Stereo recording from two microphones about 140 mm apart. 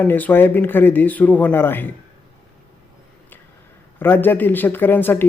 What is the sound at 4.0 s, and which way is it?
Speech, 15° left (ahead or behind).